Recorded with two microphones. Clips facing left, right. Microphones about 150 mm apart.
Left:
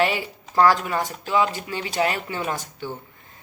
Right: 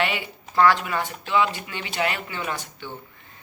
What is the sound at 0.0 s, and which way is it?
Speech, 35° left (ahead or behind).